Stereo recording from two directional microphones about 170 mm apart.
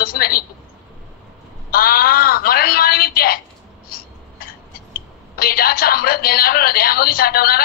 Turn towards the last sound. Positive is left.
turn(degrees=60)  # may be behind; listen again after turning